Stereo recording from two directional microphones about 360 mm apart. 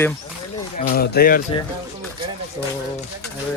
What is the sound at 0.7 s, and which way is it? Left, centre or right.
Speech, left.